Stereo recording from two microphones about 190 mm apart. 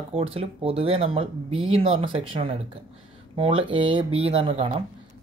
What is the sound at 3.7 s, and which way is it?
Speech, 25° right (ahead or behind).